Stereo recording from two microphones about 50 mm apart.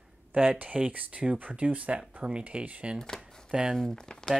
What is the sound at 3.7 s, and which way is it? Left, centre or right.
Speech, centre.